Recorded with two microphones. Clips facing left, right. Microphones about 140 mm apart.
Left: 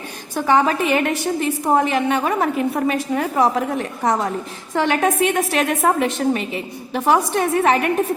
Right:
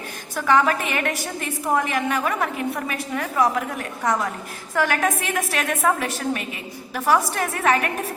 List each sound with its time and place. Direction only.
0.3 s a woman's voice: 20° left (ahead or behind)